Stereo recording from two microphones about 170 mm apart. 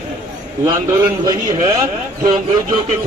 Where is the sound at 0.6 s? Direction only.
20° right (ahead or behind).